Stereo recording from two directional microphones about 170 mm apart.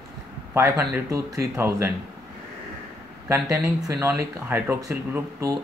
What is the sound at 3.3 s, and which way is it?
Speech, 15° right (ahead or behind).